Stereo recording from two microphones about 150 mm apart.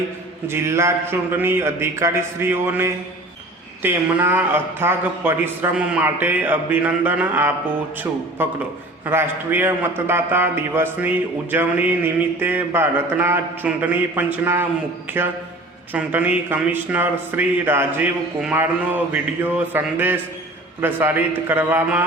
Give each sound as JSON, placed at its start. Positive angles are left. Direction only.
{"t": 0.4, "sound": "a man's voice", "side_deg": -15}
{"t": 15.9, "sound": "a man's voice", "side_deg": -10}